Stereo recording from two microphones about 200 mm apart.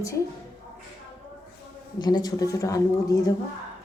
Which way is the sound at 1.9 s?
20° left (ahead or behind).